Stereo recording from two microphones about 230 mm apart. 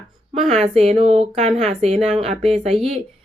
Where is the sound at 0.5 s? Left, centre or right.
Right.